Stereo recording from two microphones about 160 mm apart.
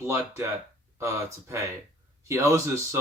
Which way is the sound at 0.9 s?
15° right (ahead or behind).